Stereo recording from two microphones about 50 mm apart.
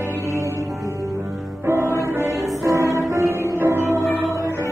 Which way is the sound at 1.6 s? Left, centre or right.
Right.